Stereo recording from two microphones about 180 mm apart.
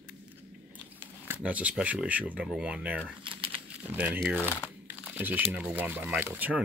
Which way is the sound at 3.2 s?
30° right (ahead or behind).